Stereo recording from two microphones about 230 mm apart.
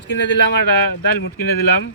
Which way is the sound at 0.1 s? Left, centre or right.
Left.